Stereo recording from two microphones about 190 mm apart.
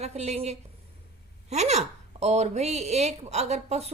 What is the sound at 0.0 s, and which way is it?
Speech, 35° right (ahead or behind).